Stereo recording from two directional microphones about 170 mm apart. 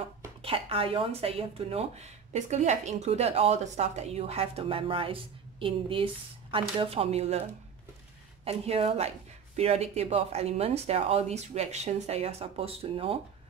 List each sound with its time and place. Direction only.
0.4 s speech: 35° right (ahead or behind)
8.5 s speech: 35° right (ahead or behind)